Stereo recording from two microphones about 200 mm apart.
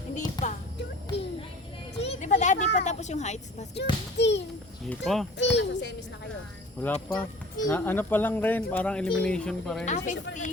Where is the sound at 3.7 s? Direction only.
60° left (ahead or behind).